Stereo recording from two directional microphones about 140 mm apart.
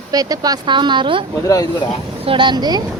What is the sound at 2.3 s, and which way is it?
Speech, 35° right (ahead or behind).